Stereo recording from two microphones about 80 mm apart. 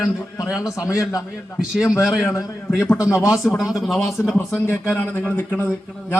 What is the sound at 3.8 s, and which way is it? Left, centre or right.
Speech, centre.